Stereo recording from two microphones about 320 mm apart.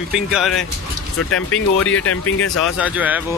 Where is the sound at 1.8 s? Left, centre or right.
Left.